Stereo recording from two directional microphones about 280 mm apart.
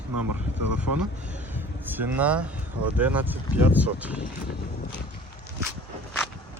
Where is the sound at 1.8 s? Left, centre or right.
Centre.